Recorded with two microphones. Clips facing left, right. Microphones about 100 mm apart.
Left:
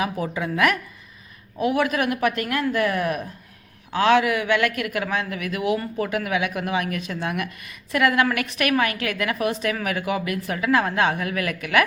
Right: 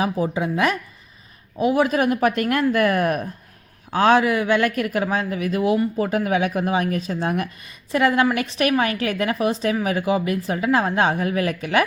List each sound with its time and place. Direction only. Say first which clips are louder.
0.0 s a woman's voice: right 4 dB; 25° right (ahead or behind)